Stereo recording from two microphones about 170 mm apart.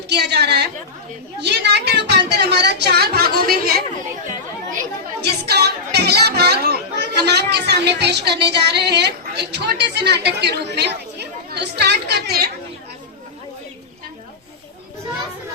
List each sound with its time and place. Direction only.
0.1 s a woman's voice: 75° right (ahead or behind)
1.4 s a sound: 80° right; by 3.8 s 60° right (ahead or behind)
5.2 s music: 75° right (ahead or behind)